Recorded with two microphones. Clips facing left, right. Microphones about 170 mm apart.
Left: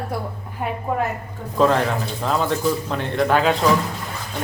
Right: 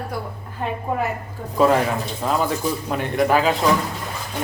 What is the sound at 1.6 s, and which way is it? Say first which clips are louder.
Speech: right 1 dB; 10° right (ahead or behind).